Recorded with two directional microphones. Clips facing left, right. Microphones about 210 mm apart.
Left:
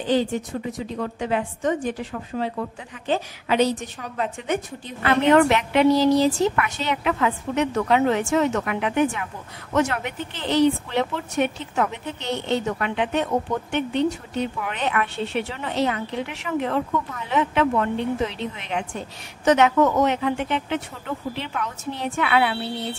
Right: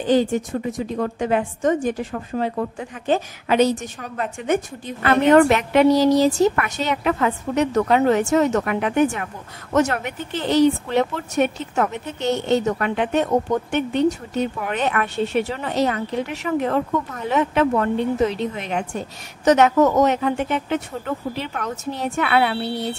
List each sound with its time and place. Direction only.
0.0 s a woman's voice: 45° right (ahead or behind)